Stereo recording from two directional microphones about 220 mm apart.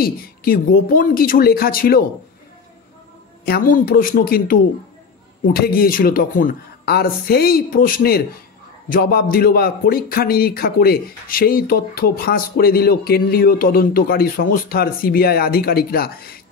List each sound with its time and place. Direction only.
0.0 s speech: 40° left (ahead or behind)
3.4 s a man's voice: 40° left (ahead or behind)